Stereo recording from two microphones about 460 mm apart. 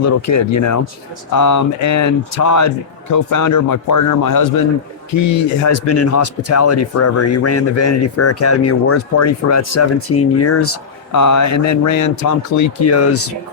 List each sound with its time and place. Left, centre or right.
0.0 s speech: left